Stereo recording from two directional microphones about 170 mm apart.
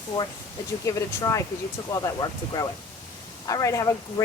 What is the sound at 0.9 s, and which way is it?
Speech, 20° left (ahead or behind).